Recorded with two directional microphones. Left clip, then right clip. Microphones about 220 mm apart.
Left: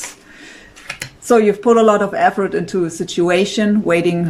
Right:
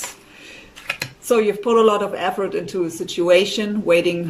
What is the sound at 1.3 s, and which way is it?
Speech, 30° left (ahead or behind).